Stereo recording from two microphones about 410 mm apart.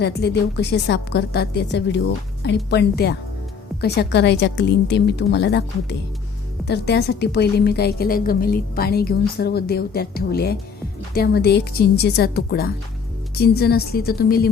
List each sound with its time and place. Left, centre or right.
0.0 s a woman's voice: left